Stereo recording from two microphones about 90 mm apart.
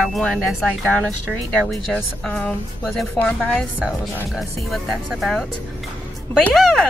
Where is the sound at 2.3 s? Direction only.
15° left (ahead or behind).